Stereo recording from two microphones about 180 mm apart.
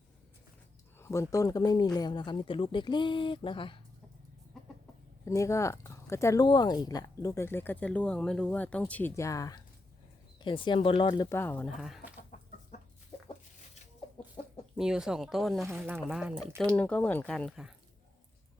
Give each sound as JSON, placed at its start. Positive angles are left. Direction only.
{"t": 0.9, "sound": "speech", "side_deg": 15}
{"t": 4.5, "sound": "chicken", "side_deg": 0}
{"t": 5.2, "sound": "speech", "side_deg": 15}
{"t": 11.3, "sound": "speech", "side_deg": 10}
{"t": 11.8, "sound": "speech", "side_deg": 0}
{"t": 12.3, "sound": "chicken", "side_deg": 45}
{"t": 14.4, "sound": "chicken", "side_deg": 35}
{"t": 14.8, "sound": "speech", "side_deg": -5}
{"t": 15.7, "sound": "speech", "side_deg": -10}